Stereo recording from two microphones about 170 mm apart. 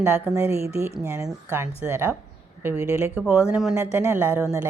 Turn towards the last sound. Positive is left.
turn(degrees=-10)  # may be behind; listen again after turning